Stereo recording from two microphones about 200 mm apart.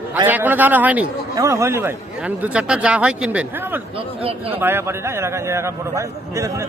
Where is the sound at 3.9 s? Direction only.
30° right (ahead or behind).